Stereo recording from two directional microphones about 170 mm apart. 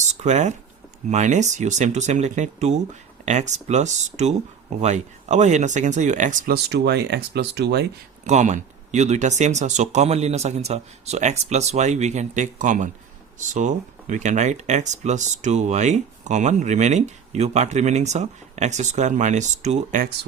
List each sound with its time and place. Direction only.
0.1 s speech: 40° right (ahead or behind); by 7.9 s 80° right
8.2 s speech: 45° right (ahead or behind)